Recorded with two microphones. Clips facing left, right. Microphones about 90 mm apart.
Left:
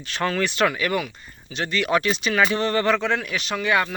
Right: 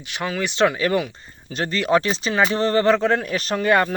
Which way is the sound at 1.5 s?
40° right (ahead or behind).